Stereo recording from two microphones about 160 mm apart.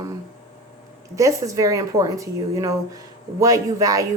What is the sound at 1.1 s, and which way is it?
A woman's voice, 20° right (ahead or behind).